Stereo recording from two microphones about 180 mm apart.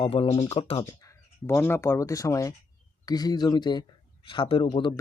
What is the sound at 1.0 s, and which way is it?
Speech, 15° left (ahead or behind).